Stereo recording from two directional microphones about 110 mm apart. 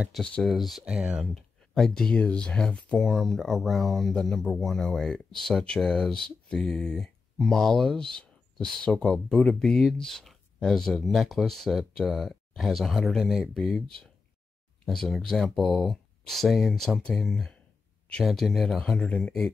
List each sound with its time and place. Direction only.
0.1 s speech: 5° left (ahead or behind)
1.3 s speech: 5° left (ahead or behind)